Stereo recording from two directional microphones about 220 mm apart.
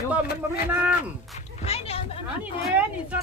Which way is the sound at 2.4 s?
5° right (ahead or behind).